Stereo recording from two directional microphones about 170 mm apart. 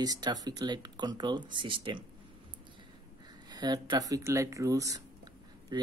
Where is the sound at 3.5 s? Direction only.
25° right (ahead or behind).